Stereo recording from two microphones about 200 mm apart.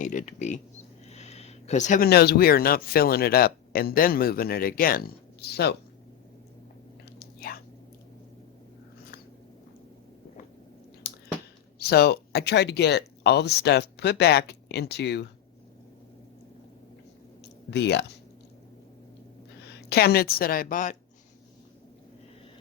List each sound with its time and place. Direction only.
0.0 s speech: 40° left (ahead or behind)
1.1 s a sound: 35° left (ahead or behind)
2.0 s speech: 55° left (ahead or behind)
7.2 s whispering: 50° left (ahead or behind)
11.1 s chewing: 50° left (ahead or behind)
11.8 s speech: 55° left (ahead or behind)
17.7 s speech: 60° left (ahead or behind)
19.9 s speech: 50° left (ahead or behind)